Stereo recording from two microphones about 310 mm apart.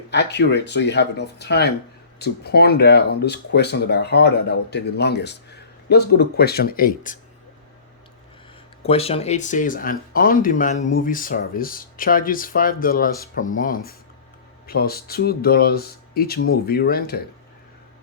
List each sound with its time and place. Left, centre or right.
0.1 s speech: left
8.8 s speech: centre